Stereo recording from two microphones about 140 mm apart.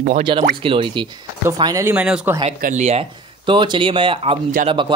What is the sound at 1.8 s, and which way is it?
Speech, 10° right (ahead or behind).